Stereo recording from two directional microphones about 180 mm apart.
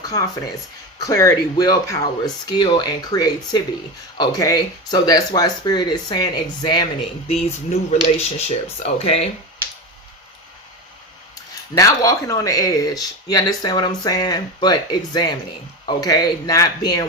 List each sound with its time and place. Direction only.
0.0 s speech: 20° left (ahead or behind)
7.3 s speech: 35° left (ahead or behind)
11.8 s speech: 20° left (ahead or behind)